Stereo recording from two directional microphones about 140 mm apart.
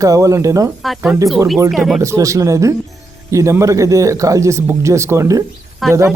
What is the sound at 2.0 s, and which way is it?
Speech, 20° right (ahead or behind).